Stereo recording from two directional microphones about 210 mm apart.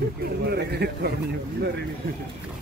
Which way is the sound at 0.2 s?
50° right (ahead or behind).